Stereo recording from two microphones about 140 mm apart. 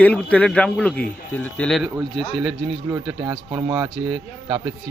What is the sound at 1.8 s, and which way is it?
Speech, centre (ahead or behind).